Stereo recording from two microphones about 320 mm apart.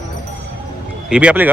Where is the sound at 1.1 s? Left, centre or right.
Centre.